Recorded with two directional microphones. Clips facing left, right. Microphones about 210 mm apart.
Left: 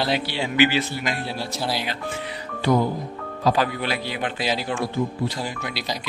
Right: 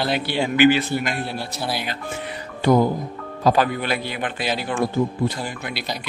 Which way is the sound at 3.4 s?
50° right (ahead or behind).